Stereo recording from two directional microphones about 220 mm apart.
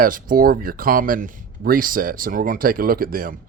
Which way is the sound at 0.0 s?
40° right (ahead or behind).